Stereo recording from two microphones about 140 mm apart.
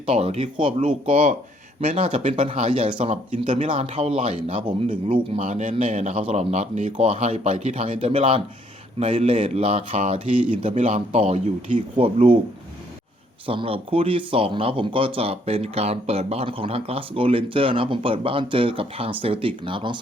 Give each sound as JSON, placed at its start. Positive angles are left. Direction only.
{"t": 0.0, "sound": "speech", "side_deg": -45}
{"t": 1.8, "sound": "a man's voice", "side_deg": -55}
{"t": 5.4, "sound": "a man's voice", "side_deg": -55}
{"t": 6.9, "sound": "a man's voice", "side_deg": -45}
{"t": 13.5, "sound": "speech", "side_deg": -40}